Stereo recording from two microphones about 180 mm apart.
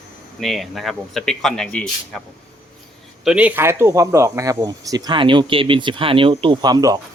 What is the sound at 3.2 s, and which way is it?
Speech, 5° right (ahead or behind).